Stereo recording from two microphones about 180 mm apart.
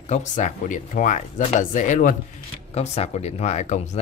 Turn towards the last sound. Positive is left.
turn(degrees=40)  # may be behind; listen again after turning